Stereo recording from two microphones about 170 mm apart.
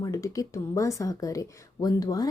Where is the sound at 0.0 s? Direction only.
20° left (ahead or behind).